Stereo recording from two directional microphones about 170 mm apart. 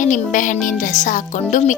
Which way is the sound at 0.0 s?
50° left (ahead or behind).